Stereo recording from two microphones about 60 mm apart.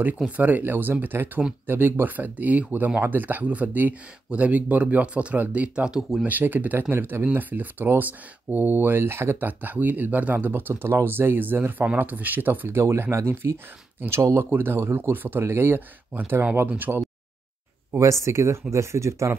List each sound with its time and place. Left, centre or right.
0.4 s speech: right; by 6.2 s centre
6.2 s speech: right
12.7 s speech: right
13.4 s speech: right
14.4 s speech: right
16.6 s speech: right
17.9 s speech: right